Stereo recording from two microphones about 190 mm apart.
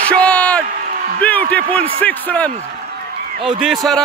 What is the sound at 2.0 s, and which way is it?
Speech, 10° left (ahead or behind).